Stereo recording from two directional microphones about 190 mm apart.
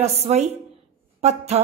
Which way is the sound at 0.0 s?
35° right (ahead or behind).